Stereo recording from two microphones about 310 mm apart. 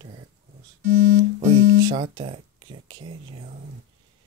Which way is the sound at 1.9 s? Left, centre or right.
Centre.